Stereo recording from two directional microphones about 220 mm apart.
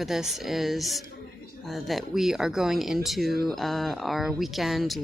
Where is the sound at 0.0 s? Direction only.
Centre (ahead or behind).